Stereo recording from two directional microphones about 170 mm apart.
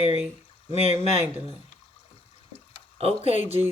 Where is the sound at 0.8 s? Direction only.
35° right (ahead or behind).